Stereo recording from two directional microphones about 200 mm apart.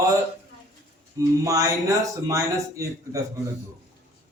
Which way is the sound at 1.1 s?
15° right (ahead or behind).